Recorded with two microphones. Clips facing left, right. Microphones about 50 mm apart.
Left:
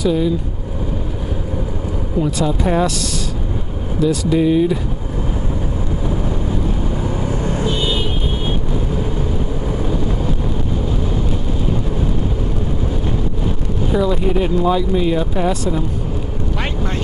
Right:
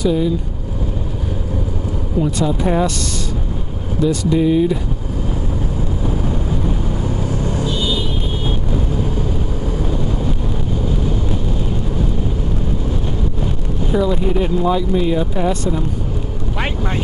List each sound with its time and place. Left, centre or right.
0.0 s speech: centre
2.1 s speech: centre
4.0 s speech: centre
7.0 s vehicle: centre
9.7 s vehicle: centre
13.9 s speech: centre